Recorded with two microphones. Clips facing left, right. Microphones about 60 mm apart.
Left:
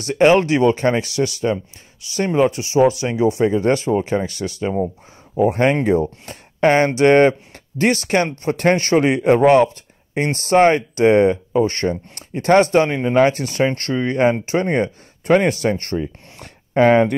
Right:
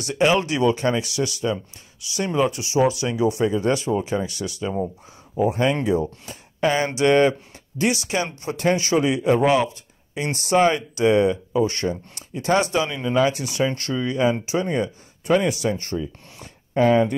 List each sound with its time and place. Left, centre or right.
0.0 s speech: left
5.4 s speech: left
6.9 s speech: left